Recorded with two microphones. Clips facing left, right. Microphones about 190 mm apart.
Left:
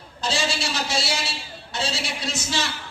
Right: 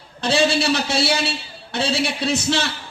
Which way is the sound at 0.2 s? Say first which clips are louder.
Right 8 dB; 60° right (ahead or behind).